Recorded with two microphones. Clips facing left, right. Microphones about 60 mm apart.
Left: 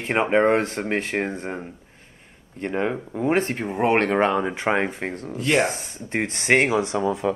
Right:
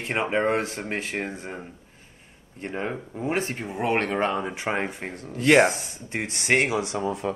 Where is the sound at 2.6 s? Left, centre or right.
Left.